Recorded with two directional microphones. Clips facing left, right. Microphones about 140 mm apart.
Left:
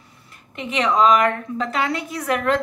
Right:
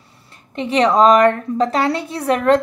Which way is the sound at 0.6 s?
35° right (ahead or behind).